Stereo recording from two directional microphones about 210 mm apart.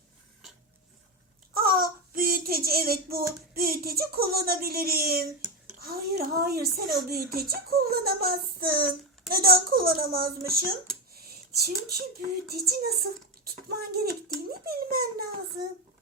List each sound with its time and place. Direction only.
1.5 s child singing: 45° right (ahead or behind)
3.5 s a child's voice: 45° right (ahead or behind)